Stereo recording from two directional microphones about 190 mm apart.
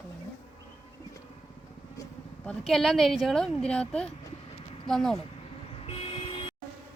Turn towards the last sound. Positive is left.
turn(degrees=30)  # may be behind; listen again after turning